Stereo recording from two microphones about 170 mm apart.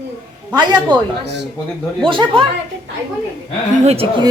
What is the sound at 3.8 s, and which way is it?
Speech, 35° right (ahead or behind).